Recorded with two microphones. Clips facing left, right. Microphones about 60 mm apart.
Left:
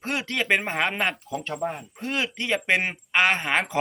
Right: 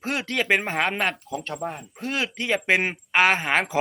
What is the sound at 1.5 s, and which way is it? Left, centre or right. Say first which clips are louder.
Speech: left 3 dB; centre.